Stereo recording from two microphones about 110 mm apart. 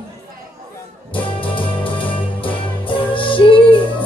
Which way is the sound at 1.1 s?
50° left (ahead or behind).